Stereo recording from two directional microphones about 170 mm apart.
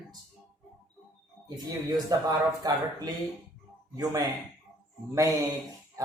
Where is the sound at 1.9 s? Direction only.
20° right (ahead or behind).